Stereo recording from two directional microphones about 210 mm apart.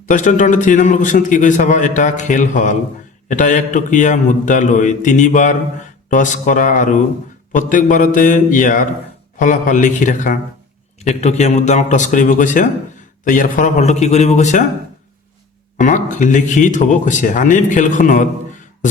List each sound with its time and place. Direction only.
0.0 s a man's voice: 40° left (ahead or behind)
15.8 s a man's voice: 35° left (ahead or behind)